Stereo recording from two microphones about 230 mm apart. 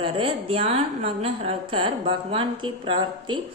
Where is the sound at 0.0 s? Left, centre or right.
Right.